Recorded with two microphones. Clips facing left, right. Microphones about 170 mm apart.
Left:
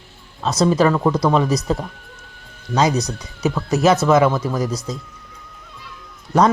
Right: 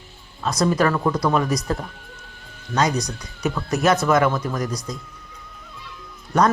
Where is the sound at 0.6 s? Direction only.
25° left (ahead or behind).